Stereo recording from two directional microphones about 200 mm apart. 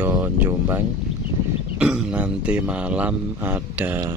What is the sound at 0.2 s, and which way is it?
Speech, 10° right (ahead or behind).